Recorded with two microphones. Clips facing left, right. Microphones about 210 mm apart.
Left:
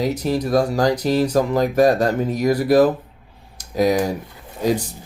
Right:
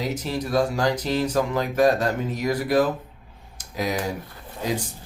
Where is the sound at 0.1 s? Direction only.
40° left (ahead or behind).